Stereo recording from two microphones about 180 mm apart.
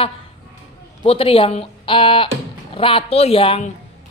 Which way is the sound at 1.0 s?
30° left (ahead or behind).